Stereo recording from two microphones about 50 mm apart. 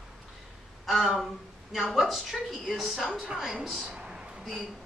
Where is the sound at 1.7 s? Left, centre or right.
Centre.